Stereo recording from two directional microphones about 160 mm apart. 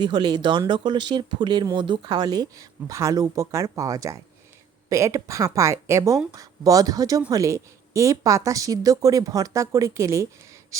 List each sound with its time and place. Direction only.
0.0 s speech: 30° right (ahead or behind)